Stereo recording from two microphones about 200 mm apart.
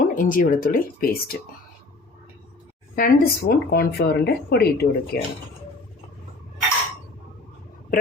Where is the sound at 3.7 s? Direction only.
50° left (ahead or behind).